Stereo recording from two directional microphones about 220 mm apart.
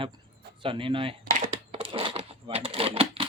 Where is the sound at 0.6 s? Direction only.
25° right (ahead or behind).